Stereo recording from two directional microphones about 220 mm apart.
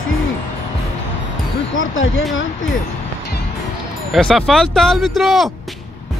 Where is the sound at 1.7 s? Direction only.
60° left (ahead or behind).